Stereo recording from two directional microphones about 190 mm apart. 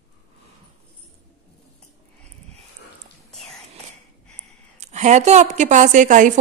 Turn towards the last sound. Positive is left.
turn(degrees=-40)  # may be behind; listen again after turning